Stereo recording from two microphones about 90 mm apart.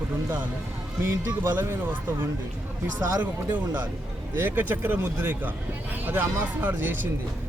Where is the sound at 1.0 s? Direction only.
25° right (ahead or behind).